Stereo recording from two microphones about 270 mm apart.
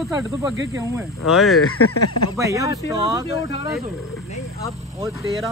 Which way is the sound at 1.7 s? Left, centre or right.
Left.